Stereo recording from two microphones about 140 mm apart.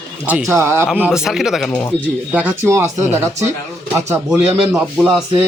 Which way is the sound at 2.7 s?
20° right (ahead or behind).